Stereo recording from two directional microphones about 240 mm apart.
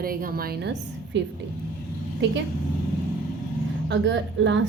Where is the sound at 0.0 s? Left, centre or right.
Right.